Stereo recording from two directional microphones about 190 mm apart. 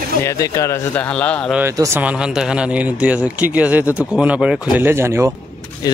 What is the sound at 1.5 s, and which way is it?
Speech, 10° right (ahead or behind).